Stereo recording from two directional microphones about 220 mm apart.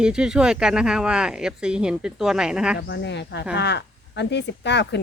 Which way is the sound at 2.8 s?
50° left (ahead or behind).